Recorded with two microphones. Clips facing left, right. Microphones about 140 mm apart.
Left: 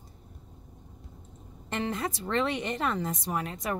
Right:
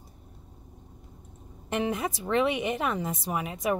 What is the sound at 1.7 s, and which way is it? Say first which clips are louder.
A woman's voice: right 3 dB; 15° right (ahead or behind).